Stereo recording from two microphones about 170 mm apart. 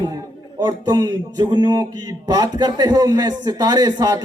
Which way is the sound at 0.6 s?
20° right (ahead or behind).